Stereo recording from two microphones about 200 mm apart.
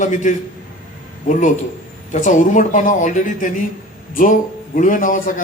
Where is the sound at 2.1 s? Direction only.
40° left (ahead or behind).